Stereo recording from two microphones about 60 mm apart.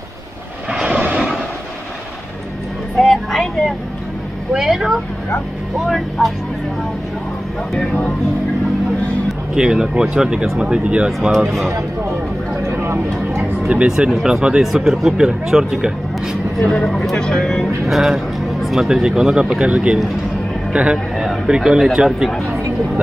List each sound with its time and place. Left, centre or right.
0.7 s vehicle: centre
3.0 s vehicle: centre
4.6 s speech: centre
7.7 s speech: centre
9.6 s speech: centre
12.7 s vehicle: right
13.7 s speech: centre
16.5 s speech: centre
17.8 s a man's voice: centre